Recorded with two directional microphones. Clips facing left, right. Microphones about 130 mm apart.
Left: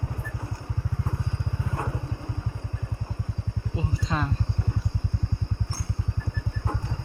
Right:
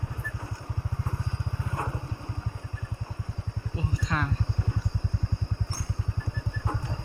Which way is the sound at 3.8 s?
25° left (ahead or behind).